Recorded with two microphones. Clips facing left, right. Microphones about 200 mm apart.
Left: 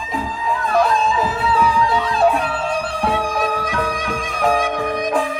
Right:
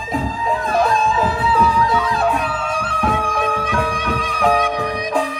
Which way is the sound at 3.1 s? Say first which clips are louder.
Even; 35° left (ahead or behind).